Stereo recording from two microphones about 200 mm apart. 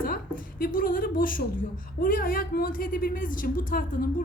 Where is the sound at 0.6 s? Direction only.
45° left (ahead or behind).